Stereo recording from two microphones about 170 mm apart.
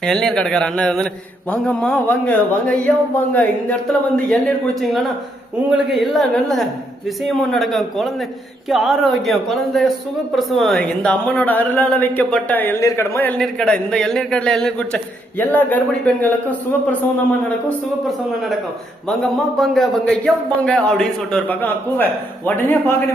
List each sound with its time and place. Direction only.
0.0 s a man's voice: 5° left (ahead or behind)
19.0 s a man's voice: centre (ahead or behind)